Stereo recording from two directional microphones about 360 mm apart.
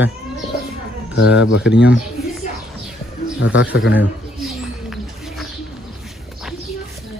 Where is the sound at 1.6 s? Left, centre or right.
Centre.